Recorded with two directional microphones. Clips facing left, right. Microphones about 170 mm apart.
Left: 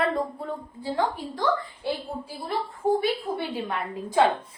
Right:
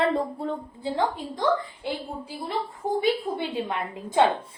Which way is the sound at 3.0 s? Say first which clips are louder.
Right 2 dB; 20° right (ahead or behind).